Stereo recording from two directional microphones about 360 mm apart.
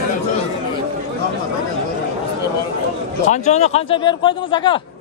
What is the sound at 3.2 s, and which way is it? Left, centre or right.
Speech, centre.